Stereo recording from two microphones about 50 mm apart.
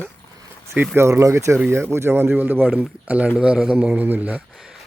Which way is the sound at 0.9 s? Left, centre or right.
Right.